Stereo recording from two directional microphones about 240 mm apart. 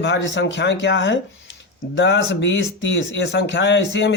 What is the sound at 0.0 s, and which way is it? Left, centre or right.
Speech, left.